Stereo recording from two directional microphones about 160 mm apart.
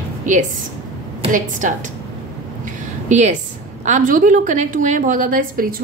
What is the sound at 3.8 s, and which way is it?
A woman's voice, 55° right (ahead or behind).